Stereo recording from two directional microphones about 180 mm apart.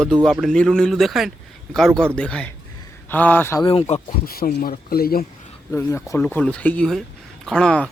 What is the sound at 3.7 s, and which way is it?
Speech, 35° left (ahead or behind).